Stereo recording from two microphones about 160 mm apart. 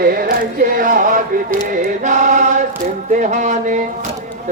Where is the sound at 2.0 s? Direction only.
50° right (ahead or behind).